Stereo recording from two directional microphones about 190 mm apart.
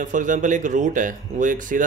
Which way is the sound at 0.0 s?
40° right (ahead or behind).